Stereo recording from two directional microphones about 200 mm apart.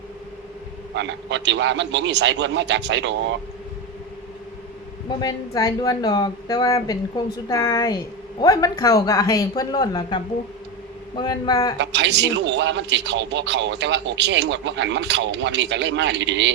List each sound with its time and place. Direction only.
0.9 s a man's voice: 65° right (ahead or behind)
5.2 s a woman's voice: 15° left (ahead or behind)
11.8 s a man's voice: 60° right (ahead or behind)